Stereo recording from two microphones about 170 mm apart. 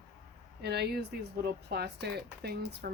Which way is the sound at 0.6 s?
70° right (ahead or behind).